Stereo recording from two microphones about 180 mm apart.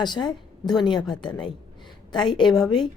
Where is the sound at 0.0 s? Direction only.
25° left (ahead or behind).